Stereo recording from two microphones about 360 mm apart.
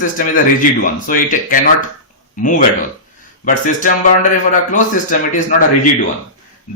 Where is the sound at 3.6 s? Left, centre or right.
Left.